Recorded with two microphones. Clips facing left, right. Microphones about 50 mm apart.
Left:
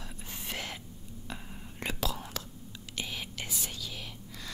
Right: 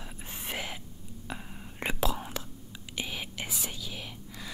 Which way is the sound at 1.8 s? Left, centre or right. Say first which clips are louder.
Right 4 dB; right.